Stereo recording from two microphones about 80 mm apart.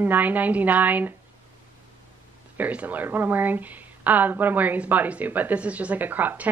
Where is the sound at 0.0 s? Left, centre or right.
Right.